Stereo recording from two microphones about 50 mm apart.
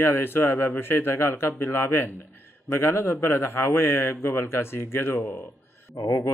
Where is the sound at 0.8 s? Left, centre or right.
Left.